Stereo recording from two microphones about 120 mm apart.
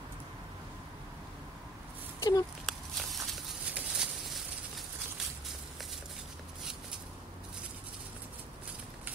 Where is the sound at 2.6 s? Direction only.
Centre (ahead or behind).